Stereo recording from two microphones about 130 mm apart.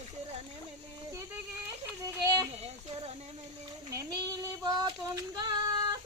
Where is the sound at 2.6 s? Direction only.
50° right (ahead or behind).